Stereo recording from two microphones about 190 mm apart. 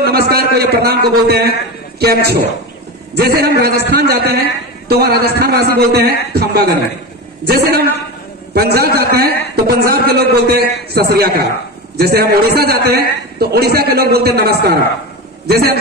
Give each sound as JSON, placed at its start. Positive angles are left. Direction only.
{"t": 0.0, "sound": "a man's voice", "side_deg": -55}